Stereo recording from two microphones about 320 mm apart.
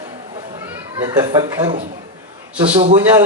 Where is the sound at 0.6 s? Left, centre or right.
Centre.